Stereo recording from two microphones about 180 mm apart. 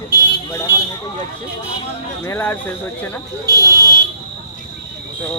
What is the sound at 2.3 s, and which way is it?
Speech, 15° left (ahead or behind).